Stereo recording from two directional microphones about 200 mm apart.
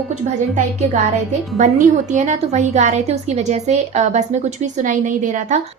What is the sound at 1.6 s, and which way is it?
A woman's voice, 35° right (ahead or behind).